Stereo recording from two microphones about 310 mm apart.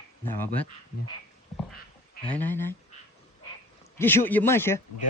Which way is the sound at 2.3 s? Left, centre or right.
Centre.